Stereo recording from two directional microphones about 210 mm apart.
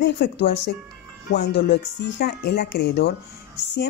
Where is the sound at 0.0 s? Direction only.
55° left (ahead or behind).